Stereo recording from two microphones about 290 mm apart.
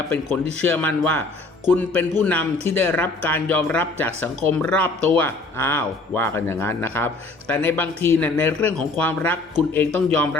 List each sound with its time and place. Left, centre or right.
0.6 s speech: centre